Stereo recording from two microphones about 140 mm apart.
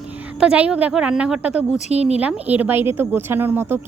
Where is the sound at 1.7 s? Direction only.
50° left (ahead or behind).